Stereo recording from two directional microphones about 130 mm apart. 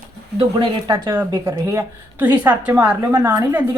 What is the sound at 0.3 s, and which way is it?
Speech, 35° right (ahead or behind).